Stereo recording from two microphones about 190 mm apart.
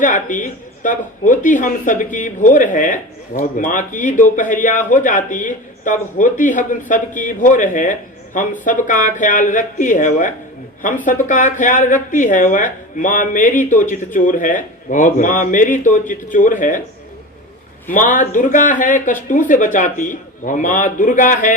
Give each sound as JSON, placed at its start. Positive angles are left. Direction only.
{"t": 0.0, "sound": "speech", "side_deg": 45}
{"t": 17.9, "sound": "speech", "side_deg": 45}